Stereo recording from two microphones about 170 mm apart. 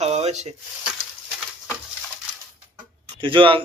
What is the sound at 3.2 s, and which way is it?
Speech, 30° right (ahead or behind).